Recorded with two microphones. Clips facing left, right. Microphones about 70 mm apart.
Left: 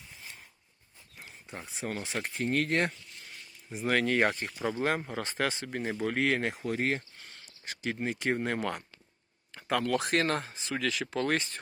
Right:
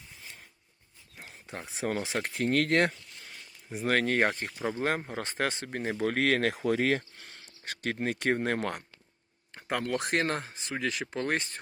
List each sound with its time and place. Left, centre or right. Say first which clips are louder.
1.7 s speech: right 4 dB; right
3.7 s speech: right 1 dB; right
4.4 s speech: even; centre; by 6.6 s right
6.7 s speech: right 4 dB; right
7.6 s speech: right 2 dB; right
9.6 s a sound: left 2 dB; right
10.0 s speech: left 1 dB; right